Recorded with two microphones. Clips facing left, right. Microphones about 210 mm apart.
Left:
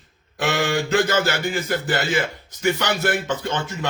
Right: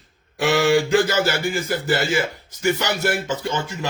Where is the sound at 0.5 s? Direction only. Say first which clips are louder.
Right 4 dB; 50° left (ahead or behind).